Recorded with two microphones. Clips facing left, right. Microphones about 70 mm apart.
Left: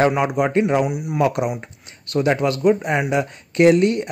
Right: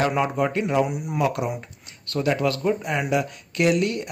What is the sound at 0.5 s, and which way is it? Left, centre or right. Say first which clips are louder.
Speech: left 7 dB; left.